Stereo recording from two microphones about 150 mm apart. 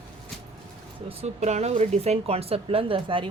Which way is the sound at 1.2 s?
50° right (ahead or behind).